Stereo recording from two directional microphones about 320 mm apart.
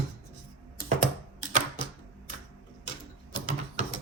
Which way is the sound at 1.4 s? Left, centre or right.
Right.